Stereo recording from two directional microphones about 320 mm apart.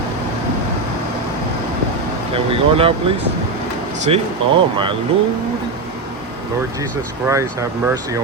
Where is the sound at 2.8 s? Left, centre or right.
Centre.